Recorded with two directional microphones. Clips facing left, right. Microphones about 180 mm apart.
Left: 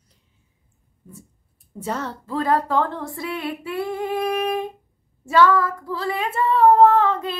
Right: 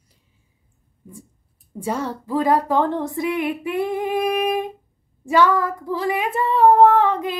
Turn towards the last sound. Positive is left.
turn(degrees=-15)  # may be behind; listen again after turning